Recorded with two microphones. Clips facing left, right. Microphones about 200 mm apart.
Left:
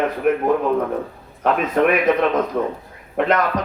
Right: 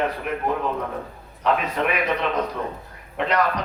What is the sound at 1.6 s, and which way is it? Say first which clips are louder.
A man's voice: left 8 dB; 50° left (ahead or behind).